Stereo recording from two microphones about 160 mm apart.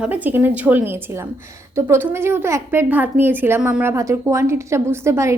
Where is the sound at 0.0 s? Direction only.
10° right (ahead or behind).